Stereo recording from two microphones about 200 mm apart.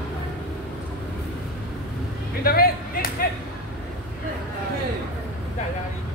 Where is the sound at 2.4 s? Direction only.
45° left (ahead or behind).